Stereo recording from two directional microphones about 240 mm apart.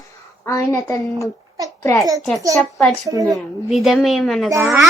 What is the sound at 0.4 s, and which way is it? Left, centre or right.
A child's voice, centre.